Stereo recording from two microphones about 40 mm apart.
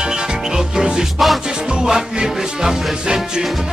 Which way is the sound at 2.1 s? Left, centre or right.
Centre.